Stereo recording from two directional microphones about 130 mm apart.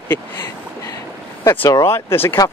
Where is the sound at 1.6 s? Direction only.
20° left (ahead or behind).